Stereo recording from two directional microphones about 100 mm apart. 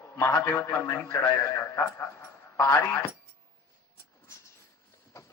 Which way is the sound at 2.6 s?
35° left (ahead or behind).